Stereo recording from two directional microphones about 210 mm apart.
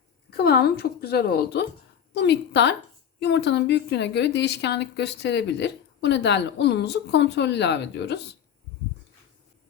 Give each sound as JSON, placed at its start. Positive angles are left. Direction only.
{"t": 0.3, "sound": "a woman's voice", "side_deg": 50}